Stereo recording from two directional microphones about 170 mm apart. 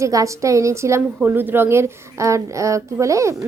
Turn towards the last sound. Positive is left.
turn(degrees=-20)  # may be behind; listen again after turning